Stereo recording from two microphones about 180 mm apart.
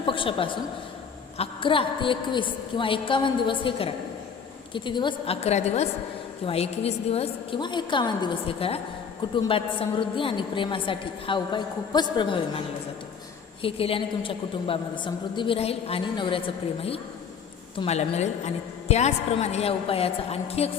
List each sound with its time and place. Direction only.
0.0 s a woman's voice: 30° left (ahead or behind)
17.7 s a woman's voice: 35° left (ahead or behind)